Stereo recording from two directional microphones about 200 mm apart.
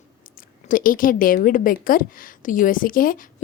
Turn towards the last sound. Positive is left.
turn(degrees=45)  # may be behind; listen again after turning